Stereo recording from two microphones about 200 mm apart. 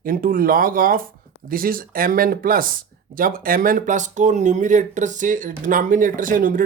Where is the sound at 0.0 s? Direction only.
45° right (ahead or behind).